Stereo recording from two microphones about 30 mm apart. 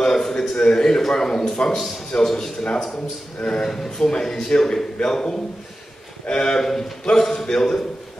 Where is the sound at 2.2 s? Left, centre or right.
Centre.